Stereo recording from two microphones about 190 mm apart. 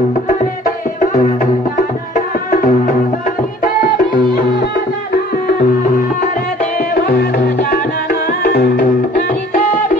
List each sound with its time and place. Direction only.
0.3 s music: 45° left (ahead or behind)